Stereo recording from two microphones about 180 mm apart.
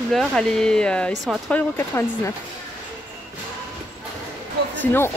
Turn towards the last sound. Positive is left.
turn(degrees=10)  # may be behind; listen again after turning